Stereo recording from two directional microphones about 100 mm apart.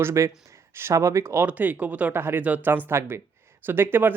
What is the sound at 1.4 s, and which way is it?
Speech, 15° right (ahead or behind).